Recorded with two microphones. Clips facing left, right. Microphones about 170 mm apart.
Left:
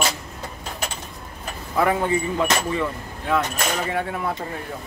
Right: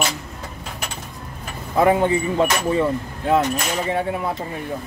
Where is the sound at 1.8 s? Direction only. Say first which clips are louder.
Right 4 dB; 25° right (ahead or behind).